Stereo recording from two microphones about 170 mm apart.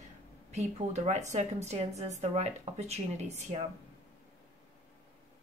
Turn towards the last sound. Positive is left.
turn(degrees=-40)  # may be behind; listen again after turning